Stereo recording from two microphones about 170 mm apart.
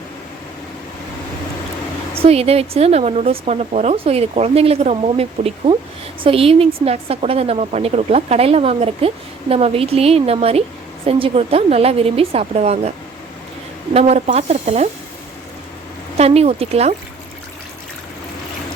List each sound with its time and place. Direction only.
2.1 s a woman's voice: 35° right (ahead or behind)
14.3 s a woman's voice: 40° right (ahead or behind)
16.1 s a woman's voice: 35° right (ahead or behind)